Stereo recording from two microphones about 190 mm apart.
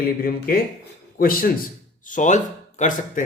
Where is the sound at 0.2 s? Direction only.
50° left (ahead or behind).